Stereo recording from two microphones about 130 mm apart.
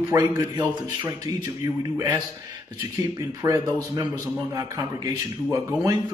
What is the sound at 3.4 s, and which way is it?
Speech, 25° right (ahead or behind).